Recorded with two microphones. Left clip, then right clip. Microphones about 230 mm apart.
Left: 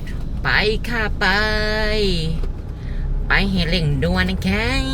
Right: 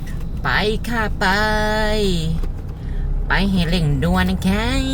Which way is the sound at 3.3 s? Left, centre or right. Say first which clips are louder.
Left 1 dB; centre.